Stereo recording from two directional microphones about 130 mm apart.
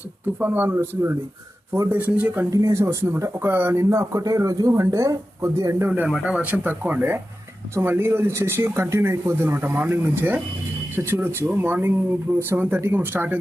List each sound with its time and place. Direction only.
0.3 s speech: 15° right (ahead or behind)
2.5 s speech: 25° right (ahead or behind)
5.9 s speech: 10° right (ahead or behind)